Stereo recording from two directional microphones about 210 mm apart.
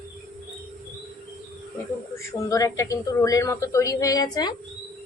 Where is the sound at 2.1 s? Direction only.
15° left (ahead or behind).